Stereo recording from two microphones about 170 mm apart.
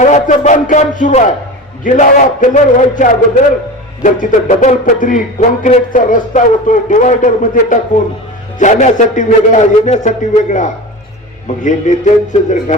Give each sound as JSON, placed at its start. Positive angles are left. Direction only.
{"t": 0.0, "sound": "a man's voice", "side_deg": 45}